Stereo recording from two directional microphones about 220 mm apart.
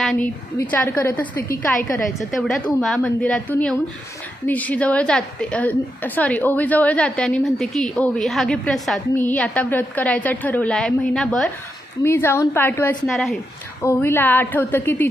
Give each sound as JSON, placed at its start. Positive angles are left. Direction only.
{"t": 0.0, "sound": "a woman's voice", "side_deg": 0}
{"t": 13.8, "sound": "a woman's voice", "side_deg": 10}